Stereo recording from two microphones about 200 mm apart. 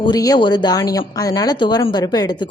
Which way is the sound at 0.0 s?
20° left (ahead or behind).